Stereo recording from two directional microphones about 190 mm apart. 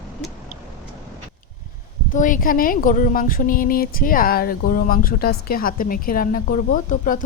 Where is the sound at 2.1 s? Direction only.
45° left (ahead or behind).